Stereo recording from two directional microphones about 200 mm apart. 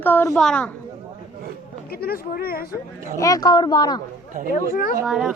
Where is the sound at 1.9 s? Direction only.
50° left (ahead or behind).